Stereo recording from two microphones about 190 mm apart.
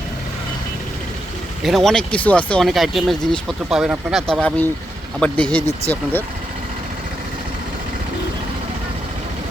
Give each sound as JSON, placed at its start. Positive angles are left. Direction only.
{"t": 1.6, "sound": "speech", "side_deg": 0}